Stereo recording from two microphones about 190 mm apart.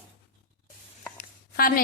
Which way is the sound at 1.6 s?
50° left (ahead or behind).